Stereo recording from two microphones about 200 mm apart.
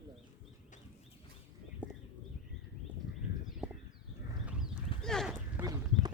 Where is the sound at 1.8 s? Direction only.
5° right (ahead or behind).